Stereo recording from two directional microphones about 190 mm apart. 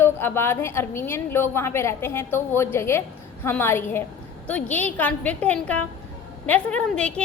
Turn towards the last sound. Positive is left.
turn(degrees=5)  # may be behind; listen again after turning